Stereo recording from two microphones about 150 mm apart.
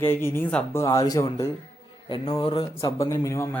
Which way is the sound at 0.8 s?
25° left (ahead or behind).